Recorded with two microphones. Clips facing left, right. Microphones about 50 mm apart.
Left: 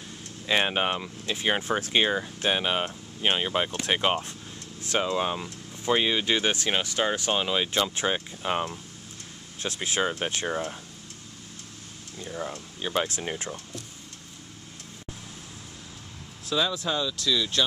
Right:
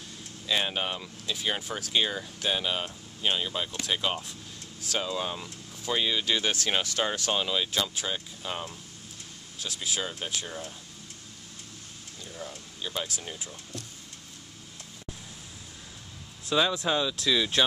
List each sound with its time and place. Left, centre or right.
0.5 s speech: left
12.2 s speech: left
16.4 s speech: centre